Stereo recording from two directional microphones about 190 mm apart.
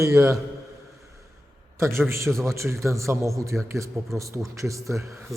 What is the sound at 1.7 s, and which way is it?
A man's voice, 15° right (ahead or behind).